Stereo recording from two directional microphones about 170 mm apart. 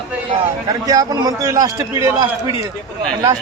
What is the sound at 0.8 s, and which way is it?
A man's voice, 20° right (ahead or behind).